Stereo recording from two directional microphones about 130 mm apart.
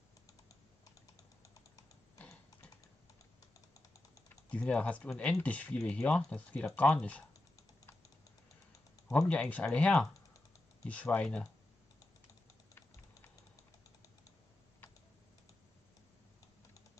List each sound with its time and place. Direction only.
1.4 s typing: 25° left (ahead or behind)
4.5 s speech: 10° left (ahead or behind)
9.1 s speech: 5° left (ahead or behind)